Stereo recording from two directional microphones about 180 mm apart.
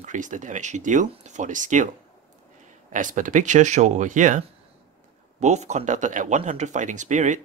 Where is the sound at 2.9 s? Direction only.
45° right (ahead or behind).